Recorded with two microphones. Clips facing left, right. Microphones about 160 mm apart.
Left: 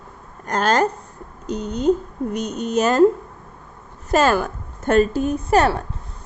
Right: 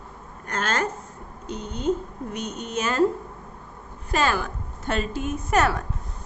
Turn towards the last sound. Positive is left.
turn(degrees=30)  # may be behind; listen again after turning